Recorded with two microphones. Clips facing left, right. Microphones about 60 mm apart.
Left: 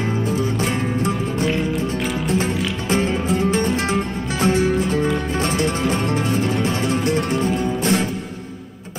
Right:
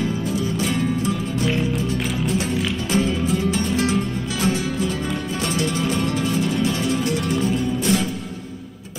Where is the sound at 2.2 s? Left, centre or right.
Left.